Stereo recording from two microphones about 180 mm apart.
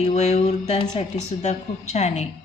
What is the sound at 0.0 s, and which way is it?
Speech, 35° left (ahead or behind).